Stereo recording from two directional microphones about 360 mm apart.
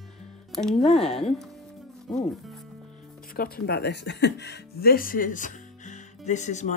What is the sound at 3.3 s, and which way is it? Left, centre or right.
Speech, left.